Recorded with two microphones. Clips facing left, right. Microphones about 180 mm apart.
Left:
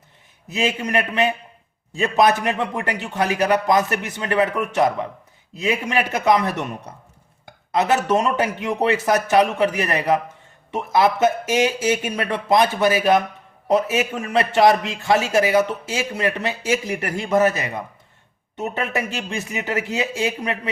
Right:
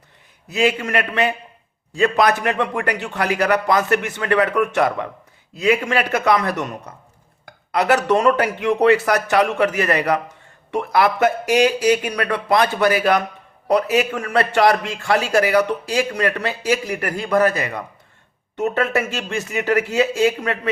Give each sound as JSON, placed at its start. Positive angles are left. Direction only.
{"t": 0.4, "sound": "a man's voice", "side_deg": 20}